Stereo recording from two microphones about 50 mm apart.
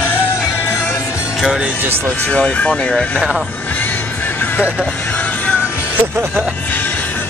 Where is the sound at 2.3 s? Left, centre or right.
Left.